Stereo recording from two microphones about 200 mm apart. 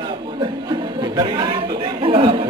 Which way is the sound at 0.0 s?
20° right (ahead or behind).